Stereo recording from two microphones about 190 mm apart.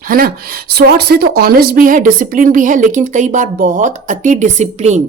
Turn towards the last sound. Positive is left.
turn(degrees=-35)  # may be behind; listen again after turning